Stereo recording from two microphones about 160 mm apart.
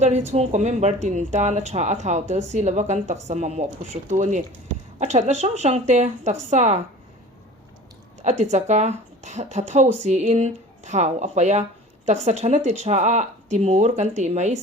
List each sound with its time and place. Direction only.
0.3 s speech: 45° right (ahead or behind)
8.2 s speech: 45° right (ahead or behind)